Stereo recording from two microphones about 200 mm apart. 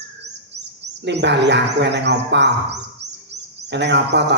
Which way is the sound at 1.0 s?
60° right (ahead or behind).